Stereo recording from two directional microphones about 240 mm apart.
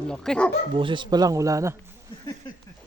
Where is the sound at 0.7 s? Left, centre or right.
Centre.